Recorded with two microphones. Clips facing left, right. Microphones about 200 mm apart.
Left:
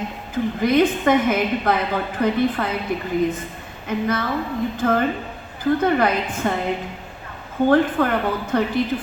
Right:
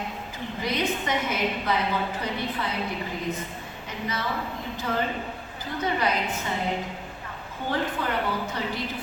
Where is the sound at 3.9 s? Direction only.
50° left (ahead or behind).